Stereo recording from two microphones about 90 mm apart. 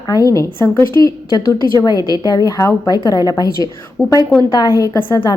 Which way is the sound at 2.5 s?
40° left (ahead or behind).